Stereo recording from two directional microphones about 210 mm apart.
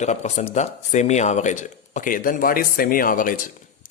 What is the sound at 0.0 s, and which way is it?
Speech, 35° left (ahead or behind).